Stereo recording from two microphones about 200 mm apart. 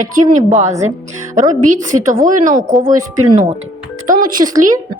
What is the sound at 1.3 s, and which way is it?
A woman's voice, 40° right (ahead or behind).